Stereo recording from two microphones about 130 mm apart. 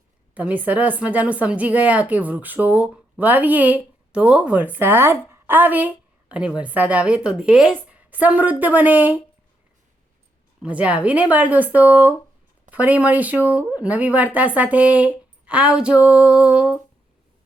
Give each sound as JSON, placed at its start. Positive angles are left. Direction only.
{"t": 0.3, "sound": "a woman's voice", "side_deg": -10}
{"t": 5.3, "sound": "a sound", "side_deg": -15}
{"t": 6.6, "sound": "a woman's voice", "side_deg": -10}
{"t": 10.6, "sound": "a woman's voice", "side_deg": -10}